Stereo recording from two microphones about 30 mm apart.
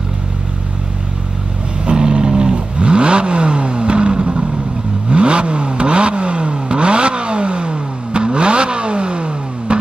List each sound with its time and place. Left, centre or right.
1.9 s vehicle: right